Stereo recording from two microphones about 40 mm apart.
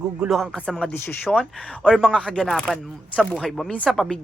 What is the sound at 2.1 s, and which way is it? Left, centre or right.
Speech, left.